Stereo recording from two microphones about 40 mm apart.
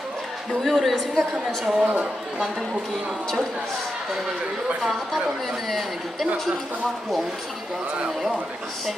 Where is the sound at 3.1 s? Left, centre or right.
Centre.